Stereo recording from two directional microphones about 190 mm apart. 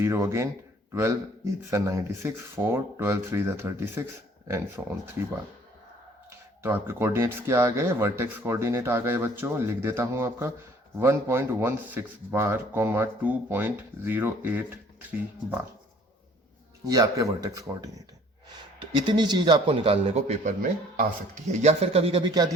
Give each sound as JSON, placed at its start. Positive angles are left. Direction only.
{"t": 0.0, "sound": "speech", "side_deg": -15}
{"t": 1.7, "sound": "speech", "side_deg": -15}
{"t": 6.6, "sound": "speech", "side_deg": -10}
{"t": 16.8, "sound": "a man's voice", "side_deg": -20}